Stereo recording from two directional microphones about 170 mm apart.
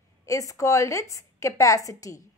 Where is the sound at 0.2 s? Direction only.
20° left (ahead or behind).